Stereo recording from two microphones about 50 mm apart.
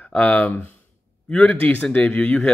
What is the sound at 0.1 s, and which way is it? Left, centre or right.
Speech, left.